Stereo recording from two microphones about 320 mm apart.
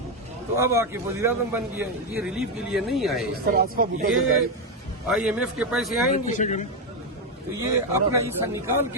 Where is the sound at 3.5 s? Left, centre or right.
Right.